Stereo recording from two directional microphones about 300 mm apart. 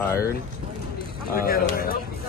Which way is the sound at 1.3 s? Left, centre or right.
Left.